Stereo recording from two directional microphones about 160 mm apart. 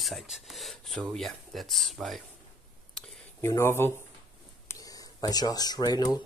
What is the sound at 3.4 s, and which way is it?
Speech, 15° left (ahead or behind).